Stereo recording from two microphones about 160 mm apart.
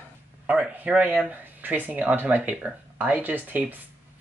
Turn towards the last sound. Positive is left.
turn(degrees=-10)  # may be behind; listen again after turning